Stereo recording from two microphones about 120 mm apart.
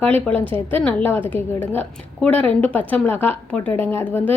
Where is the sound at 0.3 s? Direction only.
45° right (ahead or behind).